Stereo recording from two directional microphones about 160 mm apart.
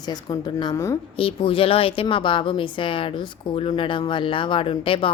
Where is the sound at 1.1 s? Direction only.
35° left (ahead or behind).